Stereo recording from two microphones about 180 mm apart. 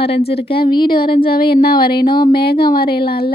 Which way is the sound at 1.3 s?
60° left (ahead or behind).